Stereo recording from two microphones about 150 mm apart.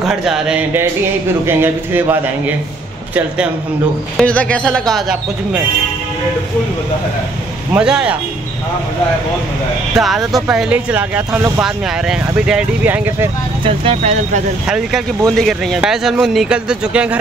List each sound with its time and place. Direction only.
0.0 s speech: centre (ahead or behind)
4.2 s speech: 10° left (ahead or behind)
7.7 s speech: 5° right (ahead or behind)
9.9 s a man's voice: centre (ahead or behind)
13.7 s speech: 40° right (ahead or behind)
14.7 s a man's voice: 5° right (ahead or behind)